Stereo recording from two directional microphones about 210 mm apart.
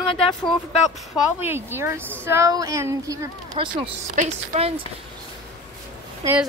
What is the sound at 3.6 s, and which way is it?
A woman's voice, 25° right (ahead or behind).